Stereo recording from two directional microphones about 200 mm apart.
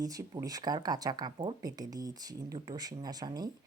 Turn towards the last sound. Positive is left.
turn(degrees=-20)  # may be behind; listen again after turning